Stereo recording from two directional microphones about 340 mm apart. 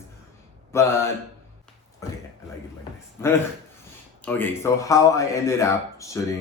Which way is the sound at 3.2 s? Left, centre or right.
Centre.